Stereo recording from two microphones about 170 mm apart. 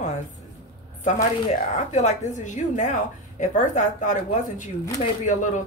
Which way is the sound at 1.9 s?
45° left (ahead or behind).